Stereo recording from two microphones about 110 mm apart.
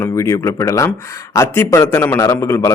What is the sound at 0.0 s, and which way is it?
A man's voice, 25° left (ahead or behind).